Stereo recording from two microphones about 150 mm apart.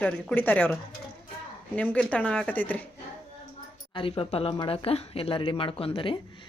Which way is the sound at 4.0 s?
35° left (ahead or behind).